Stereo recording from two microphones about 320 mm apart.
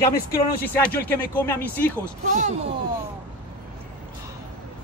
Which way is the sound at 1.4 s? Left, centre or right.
Centre.